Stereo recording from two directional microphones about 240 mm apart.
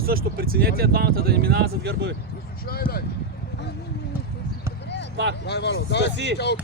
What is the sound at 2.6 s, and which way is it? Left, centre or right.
Speech, left.